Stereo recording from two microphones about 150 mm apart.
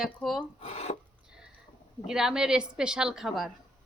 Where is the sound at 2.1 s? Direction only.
5° right (ahead or behind).